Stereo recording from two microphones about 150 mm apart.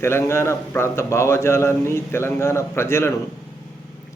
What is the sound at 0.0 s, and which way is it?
A man's voice, 15° left (ahead or behind).